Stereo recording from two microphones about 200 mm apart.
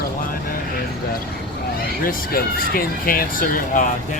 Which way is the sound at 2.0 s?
45° left (ahead or behind).